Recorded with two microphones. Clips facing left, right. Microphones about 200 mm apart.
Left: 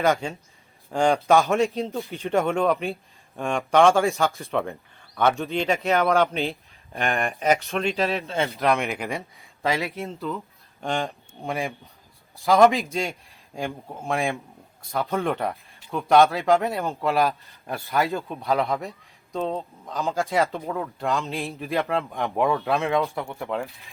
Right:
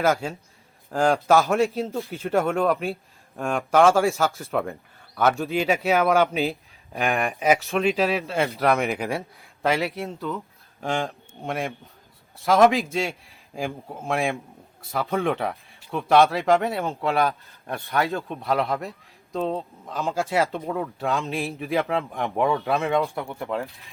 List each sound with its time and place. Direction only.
0.0 s speech: 5° right (ahead or behind)